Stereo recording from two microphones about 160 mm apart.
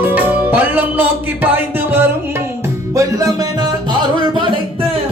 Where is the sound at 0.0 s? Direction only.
10° right (ahead or behind); by 4.9 s 30° right (ahead or behind).